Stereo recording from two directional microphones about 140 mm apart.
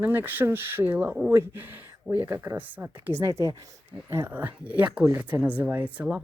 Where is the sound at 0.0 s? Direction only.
15° right (ahead or behind).